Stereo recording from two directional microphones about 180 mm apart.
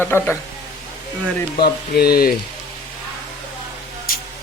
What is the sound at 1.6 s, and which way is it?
Speech, 60° left (ahead or behind).